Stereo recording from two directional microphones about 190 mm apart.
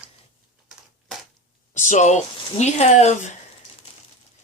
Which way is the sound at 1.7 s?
40° left (ahead or behind).